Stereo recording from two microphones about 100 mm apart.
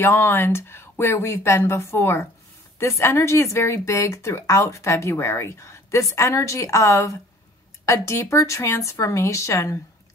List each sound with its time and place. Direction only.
0.0 s a woman's voice: 20° left (ahead or behind)